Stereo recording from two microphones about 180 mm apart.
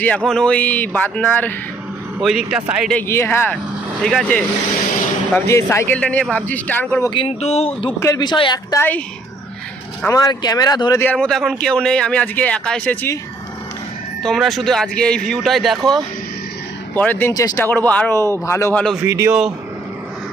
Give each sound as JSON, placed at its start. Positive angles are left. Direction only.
{"t": 0.0, "sound": "a man's voice", "side_deg": 5}
{"t": 2.1, "sound": "speech", "side_deg": -5}
{"t": 2.9, "sound": "a man's voice", "side_deg": 15}
{"t": 7.1, "sound": "speech", "side_deg": 30}
{"t": 7.9, "sound": "speech", "side_deg": 20}
{"t": 8.8, "sound": "a man's voice", "side_deg": 10}
{"t": 10.1, "sound": "speech", "side_deg": 20}
{"t": 11.0, "sound": "a man's voice", "side_deg": 5}
{"t": 14.2, "sound": "a man's voice", "side_deg": 0}
{"t": 17.7, "sound": "a man's voice", "side_deg": 10}
{"t": 19.0, "sound": "speech", "side_deg": -15}